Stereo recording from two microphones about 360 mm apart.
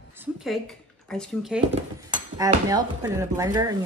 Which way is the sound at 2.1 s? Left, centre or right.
Centre.